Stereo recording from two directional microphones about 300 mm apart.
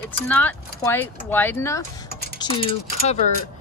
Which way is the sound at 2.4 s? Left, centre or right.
Centre.